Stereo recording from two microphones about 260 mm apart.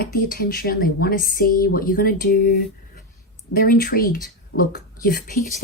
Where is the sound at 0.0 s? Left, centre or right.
Left.